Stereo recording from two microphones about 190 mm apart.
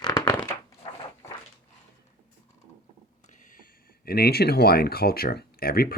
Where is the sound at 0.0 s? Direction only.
20° left (ahead or behind).